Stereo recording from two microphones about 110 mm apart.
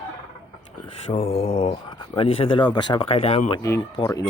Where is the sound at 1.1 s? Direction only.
60° left (ahead or behind).